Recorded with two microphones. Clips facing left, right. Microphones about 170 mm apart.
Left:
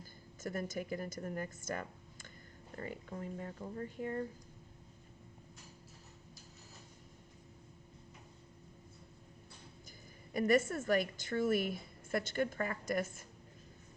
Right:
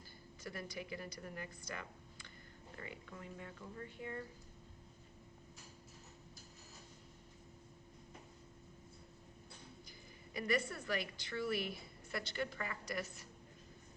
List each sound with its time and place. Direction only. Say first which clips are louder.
0.4 s speech: left 7 dB; 45° left (ahead or behind)
10.3 s a woman's voice: left 8 dB; 45° left (ahead or behind)